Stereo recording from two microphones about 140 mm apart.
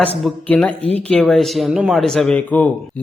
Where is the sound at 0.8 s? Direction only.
45° right (ahead or behind).